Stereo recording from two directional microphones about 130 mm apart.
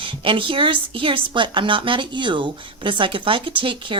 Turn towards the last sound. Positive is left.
turn(degrees=-40)  # may be behind; listen again after turning